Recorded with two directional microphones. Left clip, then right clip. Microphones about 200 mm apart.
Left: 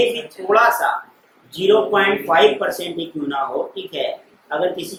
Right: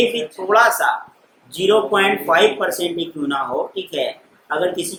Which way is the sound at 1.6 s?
25° right (ahead or behind).